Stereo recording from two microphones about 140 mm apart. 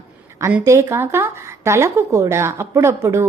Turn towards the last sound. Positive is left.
turn(degrees=-20)  # may be behind; listen again after turning